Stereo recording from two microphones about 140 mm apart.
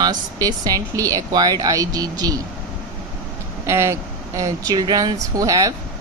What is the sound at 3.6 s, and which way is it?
Speech, 20° right (ahead or behind).